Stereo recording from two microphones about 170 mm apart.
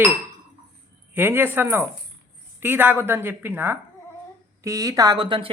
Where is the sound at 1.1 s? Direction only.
10° right (ahead or behind); by 5.5 s 30° right (ahead or behind).